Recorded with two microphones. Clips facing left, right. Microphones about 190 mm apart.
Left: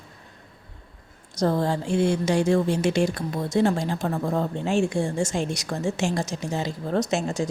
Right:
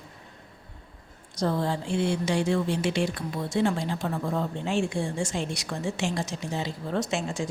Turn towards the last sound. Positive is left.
turn(degrees=40)  # may be behind; listen again after turning